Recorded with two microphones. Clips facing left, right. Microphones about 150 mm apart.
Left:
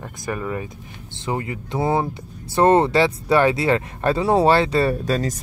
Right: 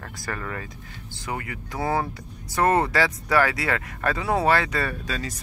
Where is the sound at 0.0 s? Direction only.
15° left (ahead or behind).